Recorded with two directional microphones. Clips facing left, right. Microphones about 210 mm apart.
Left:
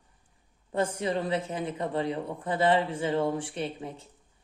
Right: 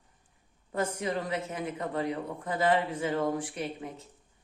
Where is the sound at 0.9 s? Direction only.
30° left (ahead or behind).